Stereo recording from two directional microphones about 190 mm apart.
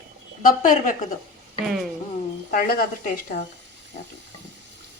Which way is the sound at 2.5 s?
50° left (ahead or behind).